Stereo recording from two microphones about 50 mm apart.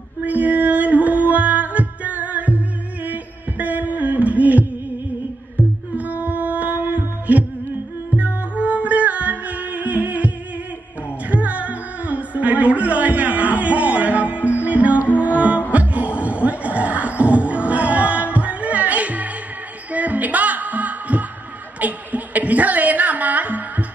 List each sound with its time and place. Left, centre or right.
0.2 s music: right
5.9 s music: right
21.7 s a sound: right